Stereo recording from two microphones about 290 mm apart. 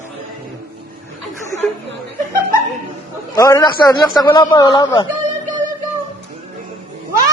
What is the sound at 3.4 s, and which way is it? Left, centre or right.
A man's voice, centre.